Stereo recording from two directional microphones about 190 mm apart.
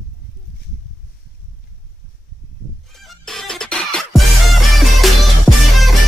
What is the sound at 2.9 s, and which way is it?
Music, centre (ahead or behind).